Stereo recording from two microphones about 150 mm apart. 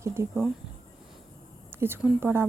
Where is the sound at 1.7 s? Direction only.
15° right (ahead or behind).